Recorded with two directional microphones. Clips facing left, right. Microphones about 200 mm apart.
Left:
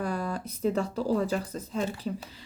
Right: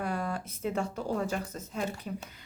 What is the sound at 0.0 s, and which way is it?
Speech, 35° left (ahead or behind).